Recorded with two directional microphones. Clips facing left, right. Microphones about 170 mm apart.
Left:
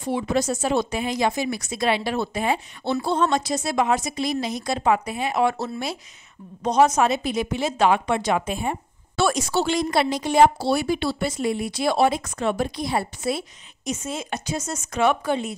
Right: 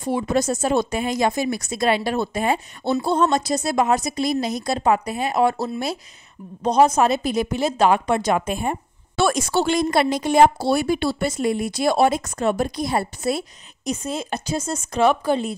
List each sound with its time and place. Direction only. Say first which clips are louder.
0.0 s a woman's voice: right 2 dB; 45° right (ahead or behind)